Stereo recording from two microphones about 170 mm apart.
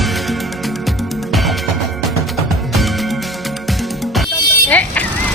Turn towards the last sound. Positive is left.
turn(degrees=10)  # may be behind; listen again after turning